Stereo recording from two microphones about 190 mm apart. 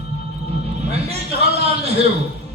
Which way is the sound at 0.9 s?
35° right (ahead or behind).